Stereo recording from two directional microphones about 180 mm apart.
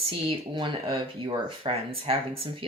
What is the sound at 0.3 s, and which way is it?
Speech, 25° right (ahead or behind).